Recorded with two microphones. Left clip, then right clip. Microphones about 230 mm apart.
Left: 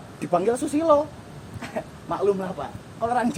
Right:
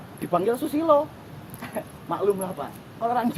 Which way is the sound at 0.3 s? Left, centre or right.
Left.